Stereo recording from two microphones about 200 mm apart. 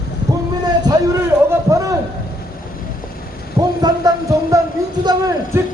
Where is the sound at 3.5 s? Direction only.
20° right (ahead or behind).